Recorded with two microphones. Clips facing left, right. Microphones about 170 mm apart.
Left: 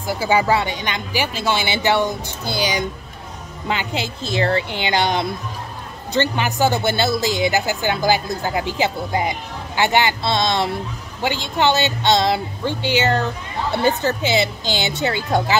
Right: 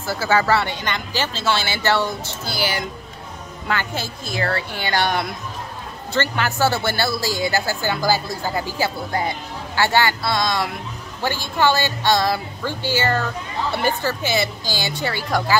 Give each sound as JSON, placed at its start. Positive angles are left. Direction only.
{"t": 0.0, "sound": "speech", "side_deg": 15}